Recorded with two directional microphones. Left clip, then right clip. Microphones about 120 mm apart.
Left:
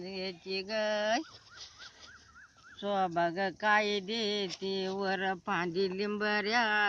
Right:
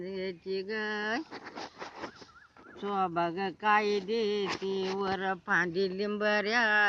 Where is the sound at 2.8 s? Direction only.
45° left (ahead or behind).